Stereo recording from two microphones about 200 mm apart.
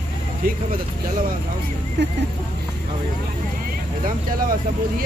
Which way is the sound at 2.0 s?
60° right (ahead or behind).